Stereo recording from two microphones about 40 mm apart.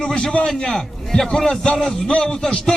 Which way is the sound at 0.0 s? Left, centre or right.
Centre.